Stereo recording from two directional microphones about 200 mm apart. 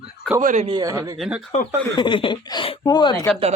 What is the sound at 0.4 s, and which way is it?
Speech, 35° right (ahead or behind).